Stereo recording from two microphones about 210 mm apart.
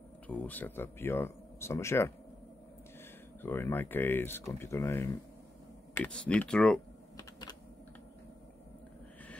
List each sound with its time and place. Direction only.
0.3 s speech: 5° left (ahead or behind)
3.4 s speech: 10° left (ahead or behind)
7.2 s typing: 20° left (ahead or behind)